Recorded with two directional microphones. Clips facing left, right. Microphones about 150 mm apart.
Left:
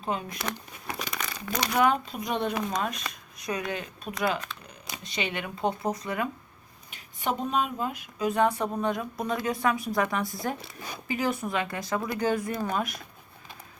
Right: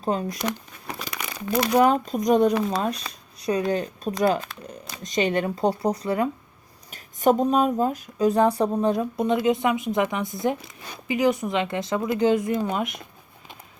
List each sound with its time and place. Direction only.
0.0 s speech: 35° right (ahead or behind)
1.2 s crumpling: 5° right (ahead or behind)
1.7 s speech: 35° right (ahead or behind)
6.9 s speech: 40° right (ahead or behind); by 13.1 s 20° right (ahead or behind)